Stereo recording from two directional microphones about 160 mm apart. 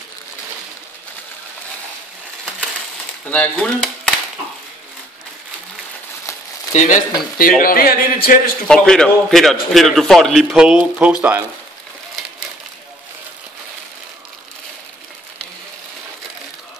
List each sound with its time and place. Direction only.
3.3 s speech: 5° left (ahead or behind)
6.7 s speech: 50° left (ahead or behind)
7.3 s speech: 65° left (ahead or behind)
8.6 s a man's voice: 5° left (ahead or behind)